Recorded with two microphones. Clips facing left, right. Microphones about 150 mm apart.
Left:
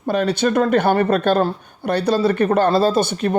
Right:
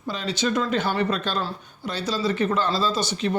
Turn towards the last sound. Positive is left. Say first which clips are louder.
# left 7 dB
turn(degrees=55)  # may be behind; listen again after turning